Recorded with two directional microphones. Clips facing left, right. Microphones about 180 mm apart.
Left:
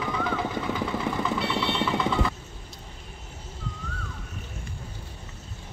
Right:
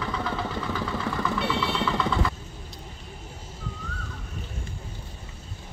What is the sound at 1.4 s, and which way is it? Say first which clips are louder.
Vehicle: even; centre (ahead or behind).